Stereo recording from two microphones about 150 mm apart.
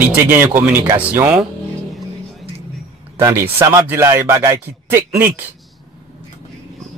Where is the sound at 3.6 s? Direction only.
15° right (ahead or behind).